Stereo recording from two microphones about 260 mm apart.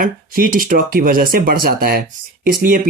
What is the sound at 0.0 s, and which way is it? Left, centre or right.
Speech, right.